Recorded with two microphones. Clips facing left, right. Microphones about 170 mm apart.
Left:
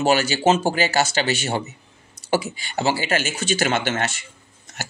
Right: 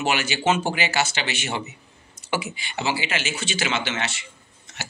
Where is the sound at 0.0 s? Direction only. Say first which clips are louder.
Left 5 dB; 40° left (ahead or behind).